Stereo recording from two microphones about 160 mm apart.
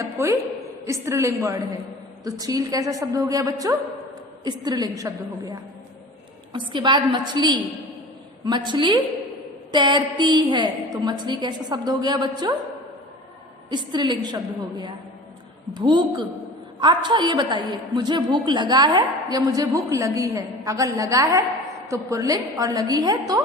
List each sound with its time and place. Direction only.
0.0 s a woman's voice: 20° right (ahead or behind)
13.7 s a woman's voice: 30° right (ahead or behind)